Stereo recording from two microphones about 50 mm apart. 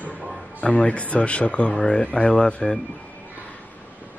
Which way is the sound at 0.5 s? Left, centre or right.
Left.